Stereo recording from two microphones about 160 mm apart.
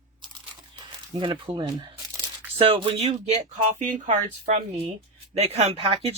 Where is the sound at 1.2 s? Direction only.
30° right (ahead or behind).